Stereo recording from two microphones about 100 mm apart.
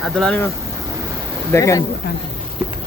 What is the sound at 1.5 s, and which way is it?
Speech, 30° left (ahead or behind).